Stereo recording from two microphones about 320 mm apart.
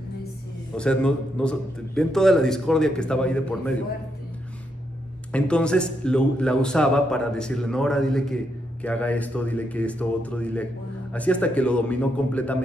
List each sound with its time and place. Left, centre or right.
0.7 s a man's voice: centre
5.3 s a man's voice: centre